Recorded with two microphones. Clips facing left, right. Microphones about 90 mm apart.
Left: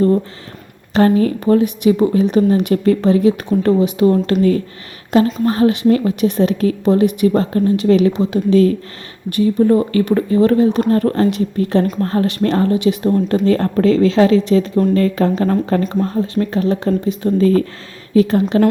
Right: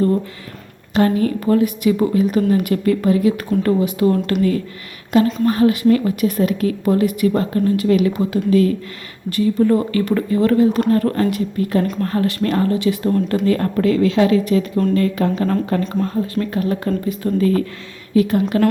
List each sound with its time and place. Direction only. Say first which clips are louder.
0.9 s a woman's voice: left 3 dB; 35° left (ahead or behind)
1.5 s a woman's voice: left 2 dB; 25° left (ahead or behind)